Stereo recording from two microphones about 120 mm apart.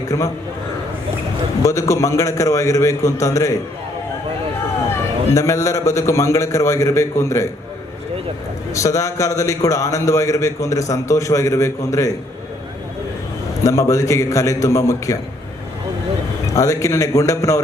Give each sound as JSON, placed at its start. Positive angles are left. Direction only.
{"t": 0.1, "sound": "a man's voice", "side_deg": 30}
{"t": 1.6, "sound": "a man's voice", "side_deg": 25}
{"t": 5.3, "sound": "a man's voice", "side_deg": 25}
{"t": 8.7, "sound": "a man's voice", "side_deg": 25}
{"t": 13.7, "sound": "a man's voice", "side_deg": 25}
{"t": 16.5, "sound": "a man's voice", "side_deg": 25}